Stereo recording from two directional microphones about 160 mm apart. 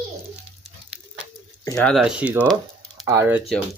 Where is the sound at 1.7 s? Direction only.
5° left (ahead or behind); by 3.4 s 15° right (ahead or behind).